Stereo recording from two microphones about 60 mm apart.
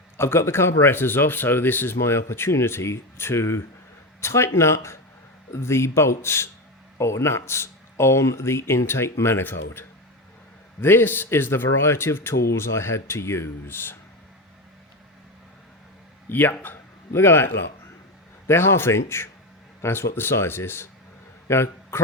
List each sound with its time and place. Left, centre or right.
0.2 s speech: left
16.3 s a man's voice: left